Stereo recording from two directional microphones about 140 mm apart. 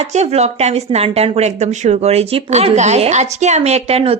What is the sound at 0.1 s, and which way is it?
A woman's voice, 50° right (ahead or behind).